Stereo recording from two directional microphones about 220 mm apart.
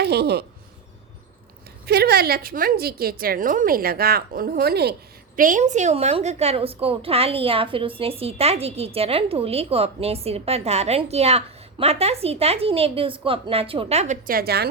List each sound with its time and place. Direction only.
0.0 s a woman's voice: 50° right (ahead or behind)
1.9 s a woman's voice: 45° right (ahead or behind)